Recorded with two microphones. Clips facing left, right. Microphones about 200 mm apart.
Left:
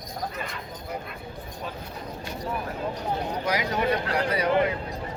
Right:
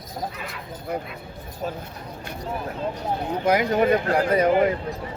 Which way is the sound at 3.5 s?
50° right (ahead or behind).